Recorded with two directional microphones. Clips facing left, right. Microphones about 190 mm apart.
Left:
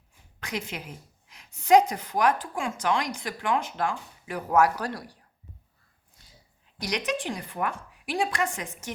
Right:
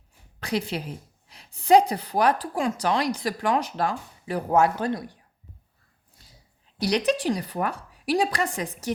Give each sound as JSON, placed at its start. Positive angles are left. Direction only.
{"t": 0.3, "sound": "a woman's voice", "side_deg": -35}
{"t": 6.7, "sound": "a woman's voice", "side_deg": -35}